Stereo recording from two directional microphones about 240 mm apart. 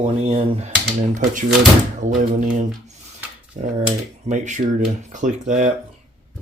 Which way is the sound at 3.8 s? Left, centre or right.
Right.